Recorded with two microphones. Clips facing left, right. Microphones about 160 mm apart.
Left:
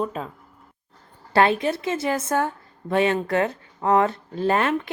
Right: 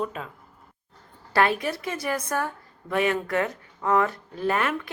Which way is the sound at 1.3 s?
25° left (ahead or behind).